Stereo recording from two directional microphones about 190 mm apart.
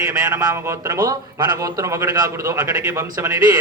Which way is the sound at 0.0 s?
15° right (ahead or behind).